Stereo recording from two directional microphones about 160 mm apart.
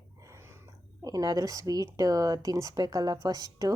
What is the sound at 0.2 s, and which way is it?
Speech, 20° right (ahead or behind).